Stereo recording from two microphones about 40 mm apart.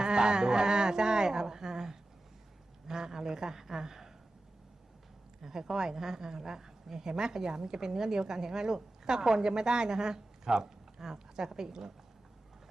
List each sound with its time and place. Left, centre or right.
0.0 s a woman's voice: centre
5.4 s a woman's voice: centre